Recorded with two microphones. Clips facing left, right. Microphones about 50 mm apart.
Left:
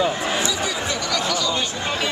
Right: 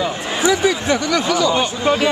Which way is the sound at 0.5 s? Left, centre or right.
Right.